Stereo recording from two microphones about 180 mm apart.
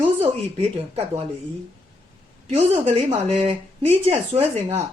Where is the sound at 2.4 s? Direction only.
35° right (ahead or behind).